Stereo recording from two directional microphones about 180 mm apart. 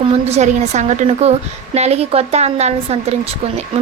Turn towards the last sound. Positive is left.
turn(degrees=-35)  # may be behind; listen again after turning